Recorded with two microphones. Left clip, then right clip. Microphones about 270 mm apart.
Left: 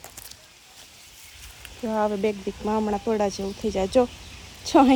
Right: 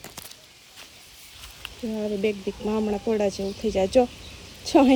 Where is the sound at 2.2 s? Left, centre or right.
Centre.